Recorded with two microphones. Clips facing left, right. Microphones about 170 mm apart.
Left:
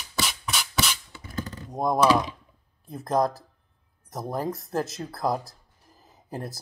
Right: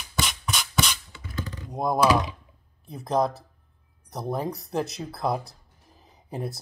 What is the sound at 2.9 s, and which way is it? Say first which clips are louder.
Speech: even; centre (ahead or behind).